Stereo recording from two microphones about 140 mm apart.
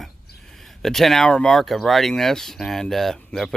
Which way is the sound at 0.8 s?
Centre (ahead or behind).